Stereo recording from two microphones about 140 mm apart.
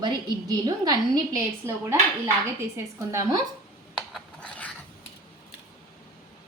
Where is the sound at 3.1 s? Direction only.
20° right (ahead or behind).